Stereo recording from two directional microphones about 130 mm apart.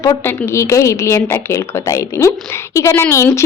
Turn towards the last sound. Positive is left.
turn(degrees=20)  # may be behind; listen again after turning